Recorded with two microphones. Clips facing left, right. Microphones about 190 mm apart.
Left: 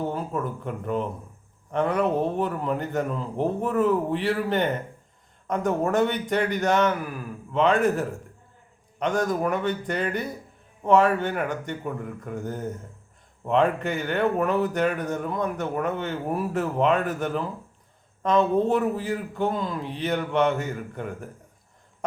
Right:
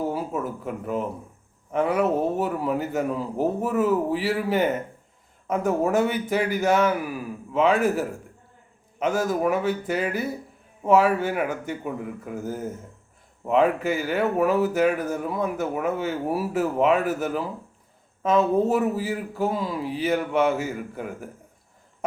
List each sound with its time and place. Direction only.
0.0 s a man's voice: 5° right (ahead or behind)